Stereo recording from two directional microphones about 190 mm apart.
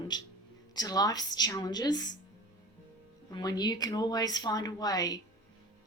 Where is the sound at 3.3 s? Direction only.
20° left (ahead or behind).